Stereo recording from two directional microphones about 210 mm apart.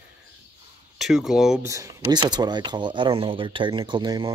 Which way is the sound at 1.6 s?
15° right (ahead or behind).